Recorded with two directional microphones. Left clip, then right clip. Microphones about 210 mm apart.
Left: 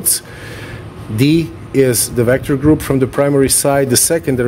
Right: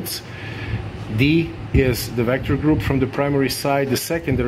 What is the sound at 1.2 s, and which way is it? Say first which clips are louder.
Speech: left 5 dB; 55° left (ahead or behind).